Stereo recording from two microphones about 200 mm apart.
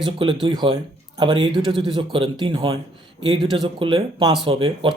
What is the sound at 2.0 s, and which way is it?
Speech, 25° right (ahead or behind).